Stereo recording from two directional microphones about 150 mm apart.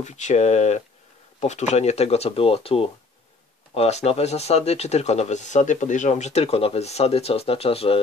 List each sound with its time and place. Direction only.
0.0 s speech: 50° left (ahead or behind)